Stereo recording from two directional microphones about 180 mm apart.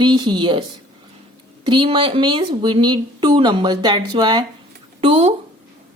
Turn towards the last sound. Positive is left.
turn(degrees=-30)  # may be behind; listen again after turning